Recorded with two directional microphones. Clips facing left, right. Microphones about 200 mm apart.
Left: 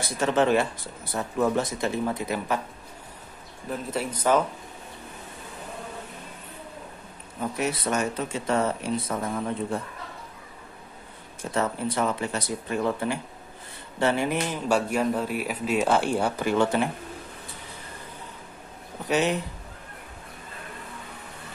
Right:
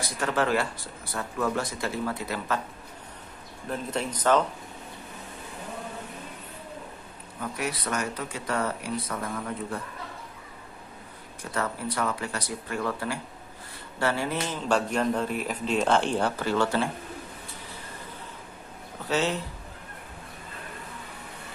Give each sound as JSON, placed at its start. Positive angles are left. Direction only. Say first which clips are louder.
{"t": 0.0, "sound": "speech", "louder": "left 4 dB", "side_deg": 20}
{"t": 3.6, "sound": "speech", "louder": "left 1 dB", "side_deg": 5}
{"t": 7.3, "sound": "speech", "louder": "left 4 dB", "side_deg": 25}
{"t": 11.5, "sound": "speech", "louder": "left 4 dB", "side_deg": 20}
{"t": 19.0, "sound": "speech", "louder": "left 3 dB", "side_deg": 15}